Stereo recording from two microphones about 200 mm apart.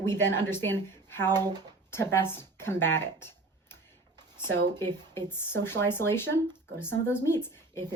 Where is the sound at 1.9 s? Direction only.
10° left (ahead or behind).